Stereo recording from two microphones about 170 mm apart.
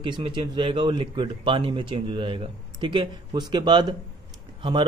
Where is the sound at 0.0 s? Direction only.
30° right (ahead or behind).